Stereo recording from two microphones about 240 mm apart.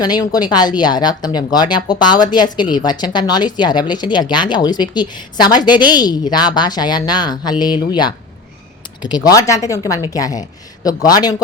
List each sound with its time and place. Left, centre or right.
0.0 s speech: centre